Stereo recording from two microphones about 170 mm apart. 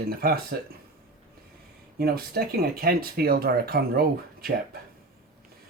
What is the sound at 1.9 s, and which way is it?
Speech, 65° right (ahead or behind).